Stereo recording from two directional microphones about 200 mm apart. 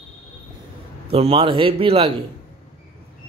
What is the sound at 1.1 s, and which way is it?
Speech, 25° right (ahead or behind).